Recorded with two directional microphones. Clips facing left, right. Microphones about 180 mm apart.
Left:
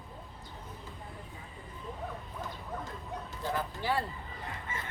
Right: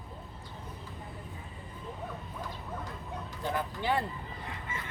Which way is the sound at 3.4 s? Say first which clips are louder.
Right 2 dB; 20° right (ahead or behind).